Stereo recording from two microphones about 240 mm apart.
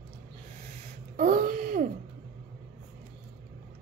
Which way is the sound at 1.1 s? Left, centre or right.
Right.